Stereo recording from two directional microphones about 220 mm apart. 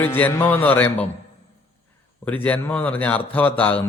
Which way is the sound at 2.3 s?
5° left (ahead or behind).